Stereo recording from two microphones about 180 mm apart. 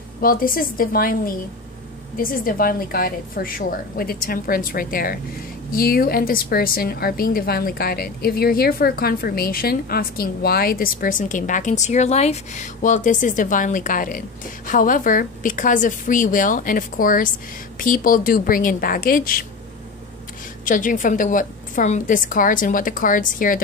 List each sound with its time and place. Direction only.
0.2 s a woman's voice: 50° left (ahead or behind)
20.6 s a woman's voice: 45° left (ahead or behind)